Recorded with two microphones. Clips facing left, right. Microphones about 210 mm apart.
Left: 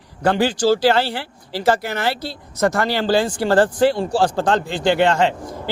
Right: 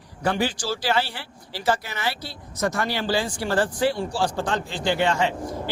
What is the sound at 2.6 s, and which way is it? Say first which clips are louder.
Speech: left 6 dB; 65° left (ahead or behind).